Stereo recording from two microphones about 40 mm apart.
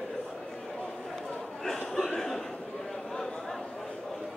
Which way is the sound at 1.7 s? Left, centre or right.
Centre.